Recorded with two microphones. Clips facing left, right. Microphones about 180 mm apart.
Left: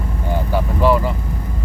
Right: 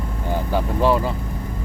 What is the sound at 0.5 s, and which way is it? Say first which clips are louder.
Speech: left 2 dB; 15° right (ahead or behind).